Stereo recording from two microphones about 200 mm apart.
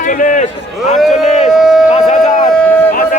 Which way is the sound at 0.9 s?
Centre (ahead or behind).